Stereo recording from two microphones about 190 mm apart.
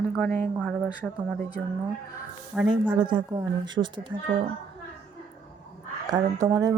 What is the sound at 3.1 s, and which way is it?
A woman's voice, 25° right (ahead or behind).